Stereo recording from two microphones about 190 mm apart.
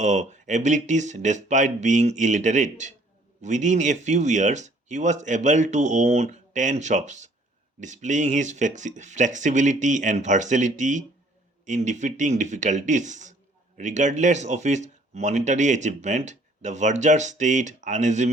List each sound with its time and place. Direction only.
0.0 s speech: 40° right (ahead or behind)